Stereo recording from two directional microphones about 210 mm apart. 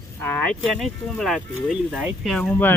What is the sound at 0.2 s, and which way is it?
Speech, 10° left (ahead or behind).